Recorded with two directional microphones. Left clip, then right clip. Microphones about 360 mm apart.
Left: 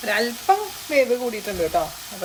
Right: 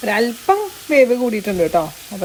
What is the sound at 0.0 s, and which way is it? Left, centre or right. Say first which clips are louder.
Speech: right 4 dB; centre.